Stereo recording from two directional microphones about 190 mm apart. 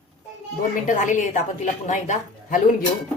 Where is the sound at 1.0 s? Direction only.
40° left (ahead or behind).